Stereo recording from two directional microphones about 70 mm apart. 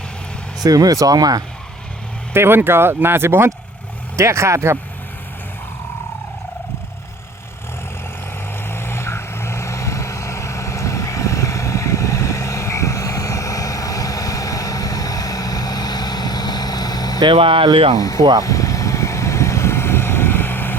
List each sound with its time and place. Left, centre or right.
0.6 s speech: right
2.3 s speech: right
8.5 s vehicle: left
17.9 s speech: left
18.2 s speech: right
18.4 s vehicle: left